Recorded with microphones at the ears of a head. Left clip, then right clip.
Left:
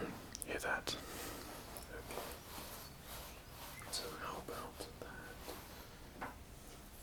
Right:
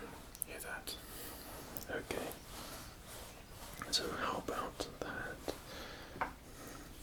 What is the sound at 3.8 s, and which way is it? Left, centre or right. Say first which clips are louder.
Whispering: right 8 dB; right.